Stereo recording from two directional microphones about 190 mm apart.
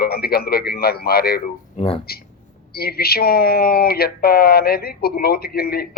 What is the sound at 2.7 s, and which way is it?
Speech, 55° left (ahead or behind).